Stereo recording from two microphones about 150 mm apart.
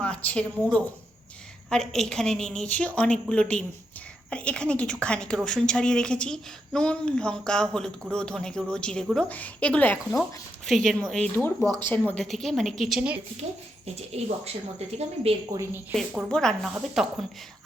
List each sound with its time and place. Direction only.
0.0 s a woman's voice: 10° left (ahead or behind)
10.7 s a woman's voice: centre (ahead or behind)
14.4 s speech: 45° right (ahead or behind)
15.5 s speech: 15° right (ahead or behind)
16.0 s a woman's voice: 5° left (ahead or behind)